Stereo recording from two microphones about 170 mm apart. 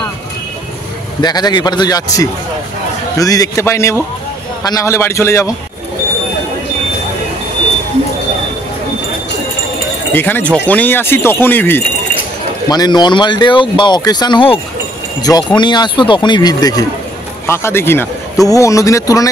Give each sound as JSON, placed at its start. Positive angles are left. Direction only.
{"t": 1.2, "sound": "speech", "side_deg": 25}
{"t": 10.1, "sound": "speech", "side_deg": 10}
{"t": 12.6, "sound": "speech", "side_deg": 25}